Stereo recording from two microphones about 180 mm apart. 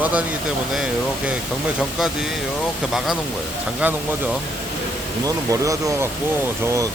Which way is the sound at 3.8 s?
10° right (ahead or behind).